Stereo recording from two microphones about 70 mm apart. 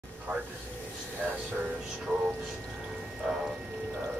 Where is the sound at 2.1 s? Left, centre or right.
Centre.